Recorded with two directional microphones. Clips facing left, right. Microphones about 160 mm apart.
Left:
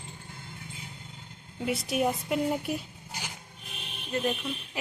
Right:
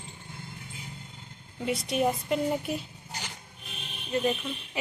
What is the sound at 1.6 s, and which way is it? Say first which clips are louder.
A woman's voice: right 1 dB; centre (ahead or behind).